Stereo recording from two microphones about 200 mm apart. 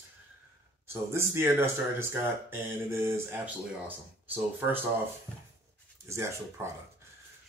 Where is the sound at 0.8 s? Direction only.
15° right (ahead or behind).